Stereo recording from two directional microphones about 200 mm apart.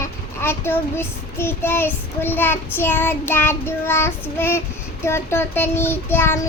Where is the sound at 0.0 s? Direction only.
10° left (ahead or behind).